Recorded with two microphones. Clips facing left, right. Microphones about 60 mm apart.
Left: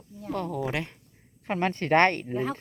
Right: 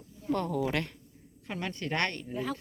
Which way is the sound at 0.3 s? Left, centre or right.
Centre.